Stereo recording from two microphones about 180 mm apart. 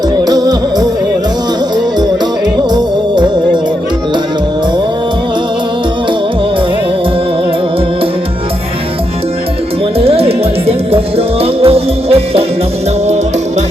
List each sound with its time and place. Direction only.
0.3 s music: 20° right (ahead or behind)
10.0 s music: 35° right (ahead or behind)